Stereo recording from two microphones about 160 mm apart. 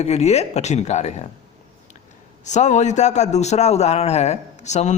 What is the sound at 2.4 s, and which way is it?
A man's voice, 45° left (ahead or behind).